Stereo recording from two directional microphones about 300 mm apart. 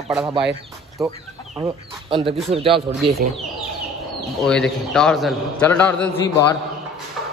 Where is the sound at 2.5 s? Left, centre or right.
Centre.